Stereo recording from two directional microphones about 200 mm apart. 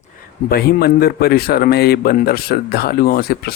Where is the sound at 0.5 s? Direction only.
50° left (ahead or behind).